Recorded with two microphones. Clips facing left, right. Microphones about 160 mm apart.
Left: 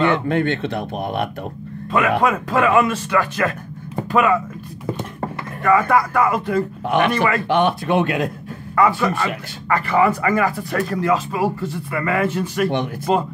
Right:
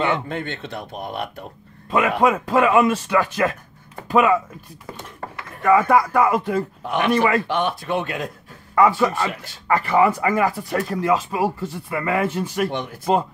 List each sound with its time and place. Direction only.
0.3 s speech: 70° left (ahead or behind)
1.9 s speech: 15° right (ahead or behind)
5.6 s speech: 10° right (ahead or behind)
6.8 s speech: 70° left (ahead or behind)
7.1 s speech: 10° right (ahead or behind)
7.4 s speech: 70° left (ahead or behind)
8.7 s speech: 10° right (ahead or behind)